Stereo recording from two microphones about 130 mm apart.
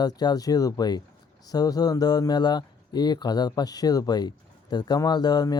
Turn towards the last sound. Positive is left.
turn(degrees=30)  # may be behind; listen again after turning